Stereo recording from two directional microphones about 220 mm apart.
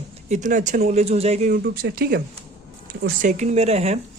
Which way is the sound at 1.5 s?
45° right (ahead or behind).